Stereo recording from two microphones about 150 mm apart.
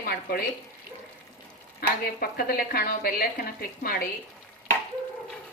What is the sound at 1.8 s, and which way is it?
A woman's voice, 90° left.